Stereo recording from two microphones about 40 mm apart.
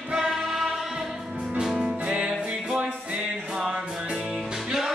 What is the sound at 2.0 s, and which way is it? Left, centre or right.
Music, right.